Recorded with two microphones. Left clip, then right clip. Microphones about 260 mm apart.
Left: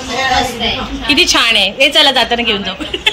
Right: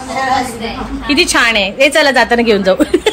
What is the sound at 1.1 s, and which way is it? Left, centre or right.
A woman's voice, centre.